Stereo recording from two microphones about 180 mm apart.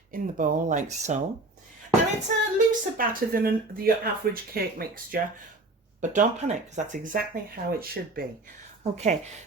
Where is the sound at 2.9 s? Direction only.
55° right (ahead or behind).